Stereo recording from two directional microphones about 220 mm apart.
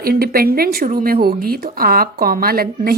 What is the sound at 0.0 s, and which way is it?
A woman's voice, 40° right (ahead or behind).